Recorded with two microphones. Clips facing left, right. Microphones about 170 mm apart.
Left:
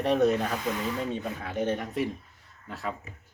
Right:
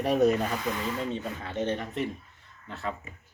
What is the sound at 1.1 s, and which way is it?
Speech, 10° left (ahead or behind).